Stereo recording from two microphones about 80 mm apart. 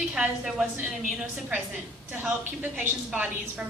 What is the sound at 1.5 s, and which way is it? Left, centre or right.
A woman's voice, centre.